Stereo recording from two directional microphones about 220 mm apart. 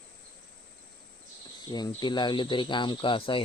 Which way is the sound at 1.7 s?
20° left (ahead or behind).